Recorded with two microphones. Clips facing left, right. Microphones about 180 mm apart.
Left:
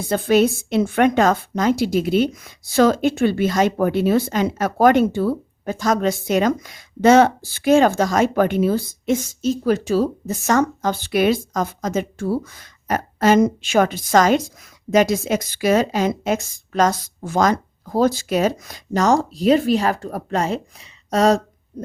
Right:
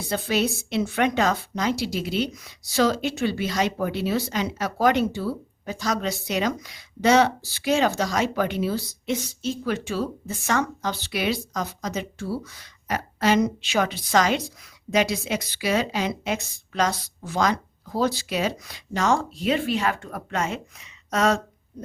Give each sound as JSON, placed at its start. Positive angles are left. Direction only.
{"t": 0.1, "sound": "a woman's voice", "side_deg": 50}